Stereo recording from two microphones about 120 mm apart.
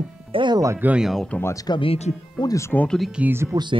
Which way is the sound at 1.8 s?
60° left (ahead or behind).